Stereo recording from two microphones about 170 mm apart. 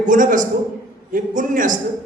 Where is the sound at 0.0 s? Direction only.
50° right (ahead or behind).